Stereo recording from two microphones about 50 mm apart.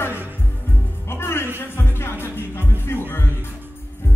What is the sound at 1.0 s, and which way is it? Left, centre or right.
Music, left.